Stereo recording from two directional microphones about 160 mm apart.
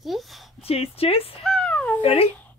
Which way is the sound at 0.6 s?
40° left (ahead or behind).